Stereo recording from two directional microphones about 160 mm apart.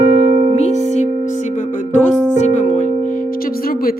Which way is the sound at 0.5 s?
45° left (ahead or behind).